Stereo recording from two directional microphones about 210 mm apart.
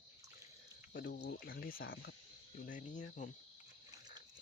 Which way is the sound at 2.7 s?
35° left (ahead or behind).